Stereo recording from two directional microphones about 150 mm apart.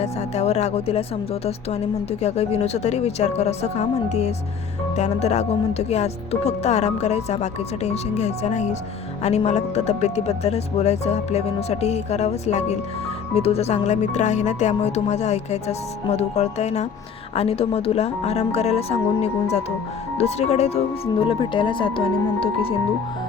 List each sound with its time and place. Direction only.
0.0 s speech: 45° left (ahead or behind)